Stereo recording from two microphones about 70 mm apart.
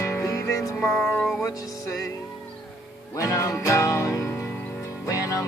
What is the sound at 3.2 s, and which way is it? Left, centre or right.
Music, left.